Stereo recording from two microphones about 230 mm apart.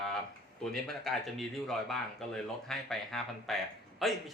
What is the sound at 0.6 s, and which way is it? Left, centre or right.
Speech, centre.